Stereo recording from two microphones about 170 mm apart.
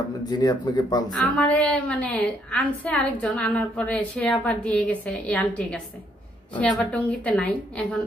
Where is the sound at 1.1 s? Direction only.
5° left (ahead or behind).